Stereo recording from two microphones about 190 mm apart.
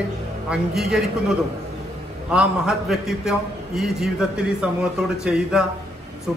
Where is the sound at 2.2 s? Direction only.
5° right (ahead or behind).